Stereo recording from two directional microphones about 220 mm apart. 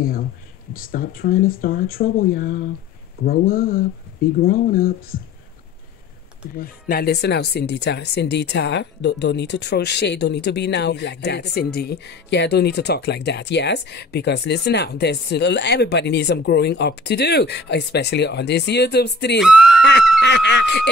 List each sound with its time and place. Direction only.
0.0 s speech: 40° left (ahead or behind)
6.5 s speech: 40° left (ahead or behind)
19.4 s speech: 5° right (ahead or behind)
19.8 s speech: 50° left (ahead or behind)